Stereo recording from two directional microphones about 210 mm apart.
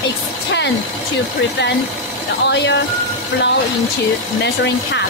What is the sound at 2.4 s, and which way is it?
Speech, 55° left (ahead or behind).